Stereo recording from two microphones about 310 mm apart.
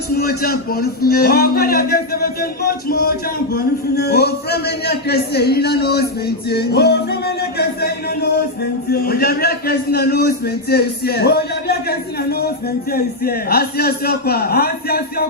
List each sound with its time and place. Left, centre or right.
0.2 s a man's voice: left